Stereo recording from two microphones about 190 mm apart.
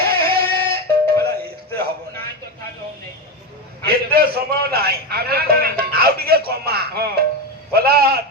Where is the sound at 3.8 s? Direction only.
55° right (ahead or behind).